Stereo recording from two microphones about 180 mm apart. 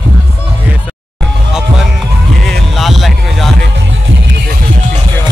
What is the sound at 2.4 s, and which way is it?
Music, centre (ahead or behind).